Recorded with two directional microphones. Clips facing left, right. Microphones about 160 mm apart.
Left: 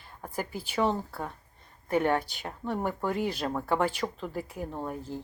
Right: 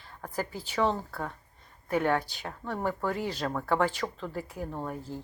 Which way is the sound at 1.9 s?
20° left (ahead or behind).